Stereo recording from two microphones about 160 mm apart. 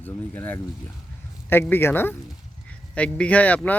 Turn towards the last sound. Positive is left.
turn(degrees=10)  # may be behind; listen again after turning